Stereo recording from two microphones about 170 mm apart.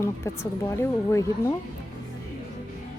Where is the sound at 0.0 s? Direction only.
15° left (ahead or behind).